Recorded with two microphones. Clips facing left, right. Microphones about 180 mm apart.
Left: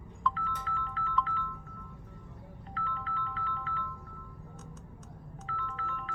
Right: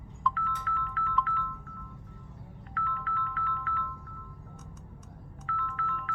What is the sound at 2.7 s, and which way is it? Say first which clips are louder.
Music: right 2 dB; 25° left (ahead or behind).